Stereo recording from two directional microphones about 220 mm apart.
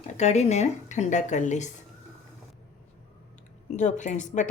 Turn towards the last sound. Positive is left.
turn(degrees=35)  # may be behind; listen again after turning